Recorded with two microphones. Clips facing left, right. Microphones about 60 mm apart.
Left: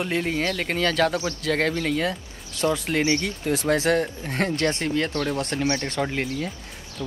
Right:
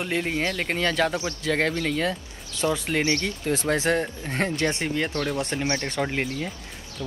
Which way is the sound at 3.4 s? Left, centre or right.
Centre.